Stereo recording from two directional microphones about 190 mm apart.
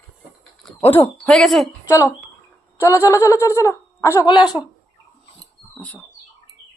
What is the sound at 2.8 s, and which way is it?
Speech, 15° left (ahead or behind).